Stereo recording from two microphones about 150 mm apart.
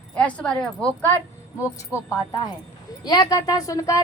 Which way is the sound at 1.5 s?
20° left (ahead or behind).